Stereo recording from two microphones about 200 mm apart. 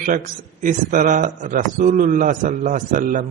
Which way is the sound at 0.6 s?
40° right (ahead or behind).